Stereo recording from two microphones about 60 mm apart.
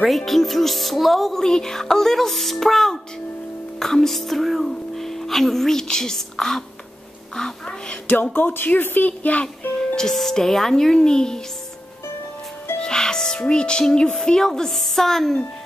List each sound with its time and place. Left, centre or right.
0.0 s speech: centre
8.1 s speech: left
9.9 s speech: centre
12.7 s speech: centre